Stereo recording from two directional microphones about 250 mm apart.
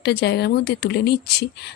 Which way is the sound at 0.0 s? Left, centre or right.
Left.